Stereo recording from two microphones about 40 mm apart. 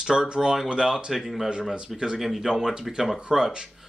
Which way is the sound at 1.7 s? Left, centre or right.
Right.